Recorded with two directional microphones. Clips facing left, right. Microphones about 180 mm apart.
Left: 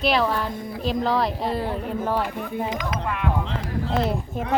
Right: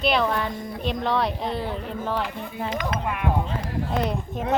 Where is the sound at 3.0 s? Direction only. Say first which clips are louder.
Left 1 dB; 15° right (ahead or behind).